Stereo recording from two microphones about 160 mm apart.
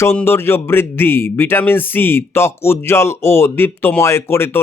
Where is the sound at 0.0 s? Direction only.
15° left (ahead or behind).